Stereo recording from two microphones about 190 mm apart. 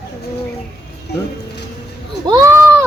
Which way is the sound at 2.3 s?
15° right (ahead or behind).